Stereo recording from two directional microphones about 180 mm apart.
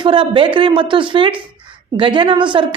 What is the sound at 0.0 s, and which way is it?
A woman's voice, 30° right (ahead or behind).